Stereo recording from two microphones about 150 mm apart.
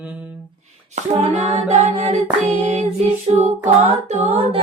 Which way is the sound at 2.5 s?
40° right (ahead or behind).